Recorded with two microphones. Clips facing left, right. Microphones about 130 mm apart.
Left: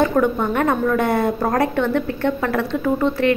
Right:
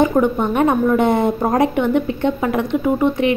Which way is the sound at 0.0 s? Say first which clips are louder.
Right 2 dB; 20° right (ahead or behind).